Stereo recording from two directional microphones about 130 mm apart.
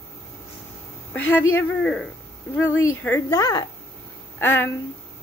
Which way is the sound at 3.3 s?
25° left (ahead or behind).